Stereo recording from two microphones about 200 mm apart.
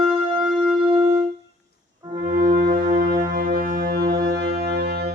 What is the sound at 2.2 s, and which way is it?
Music, 45° right (ahead or behind).